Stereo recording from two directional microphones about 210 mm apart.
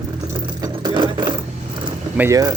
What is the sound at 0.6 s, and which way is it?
Sewing machine, 20° right (ahead or behind).